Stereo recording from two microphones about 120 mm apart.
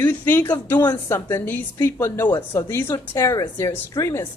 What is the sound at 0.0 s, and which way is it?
A woman's voice, 15° left (ahead or behind).